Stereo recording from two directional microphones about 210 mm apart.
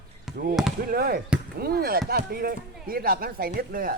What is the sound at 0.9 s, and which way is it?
Speech, 45° right (ahead or behind).